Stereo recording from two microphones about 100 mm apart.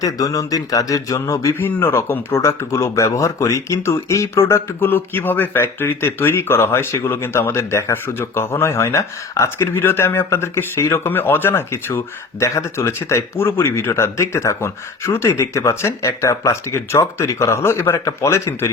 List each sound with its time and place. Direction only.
0.0 s speech: 35° left (ahead or behind)
1.5 s speech: 20° left (ahead or behind)